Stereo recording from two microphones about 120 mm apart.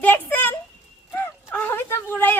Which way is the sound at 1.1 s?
15° left (ahead or behind).